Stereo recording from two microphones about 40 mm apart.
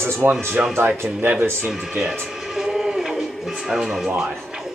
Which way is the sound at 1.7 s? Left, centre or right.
Centre.